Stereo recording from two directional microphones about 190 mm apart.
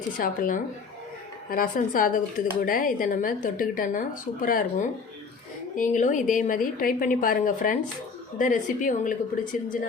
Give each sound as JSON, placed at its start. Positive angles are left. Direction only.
{"t": 0.2, "sound": "speech", "side_deg": 45}